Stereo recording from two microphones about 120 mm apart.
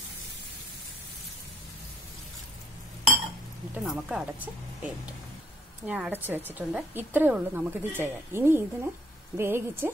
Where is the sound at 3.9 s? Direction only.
5° right (ahead or behind).